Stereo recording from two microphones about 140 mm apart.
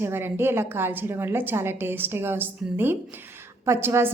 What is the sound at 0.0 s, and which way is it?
A woman's voice, 15° right (ahead or behind).